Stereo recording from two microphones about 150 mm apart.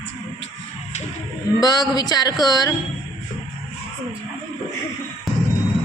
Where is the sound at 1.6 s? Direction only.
25° left (ahead or behind).